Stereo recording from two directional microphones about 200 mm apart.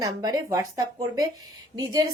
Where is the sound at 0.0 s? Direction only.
20° right (ahead or behind).